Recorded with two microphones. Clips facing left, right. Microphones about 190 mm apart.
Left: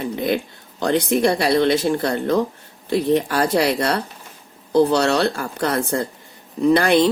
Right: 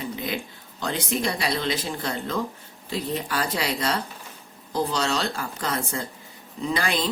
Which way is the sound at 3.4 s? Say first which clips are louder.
Left 10 dB; 45° left (ahead or behind).